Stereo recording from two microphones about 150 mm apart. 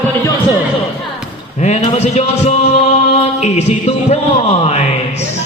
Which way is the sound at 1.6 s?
50° left (ahead or behind).